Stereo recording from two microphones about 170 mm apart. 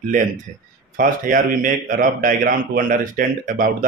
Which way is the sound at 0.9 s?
50° right (ahead or behind).